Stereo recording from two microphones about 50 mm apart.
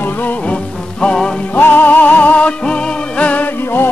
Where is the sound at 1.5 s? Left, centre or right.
Left.